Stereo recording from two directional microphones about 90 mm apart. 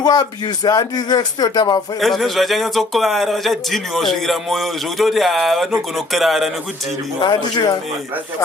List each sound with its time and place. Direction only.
0.0 s speech: 50° left (ahead or behind)
2.0 s a man's voice: centre (ahead or behind)
7.2 s speech: 50° left (ahead or behind)